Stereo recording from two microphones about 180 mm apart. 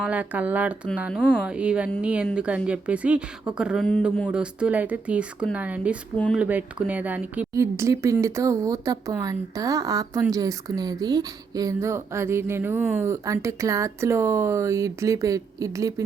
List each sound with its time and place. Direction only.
0.0 s speech: 10° right (ahead or behind)